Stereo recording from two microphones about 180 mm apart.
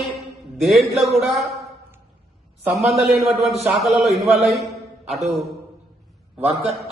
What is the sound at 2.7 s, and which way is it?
A man's voice, centre (ahead or behind).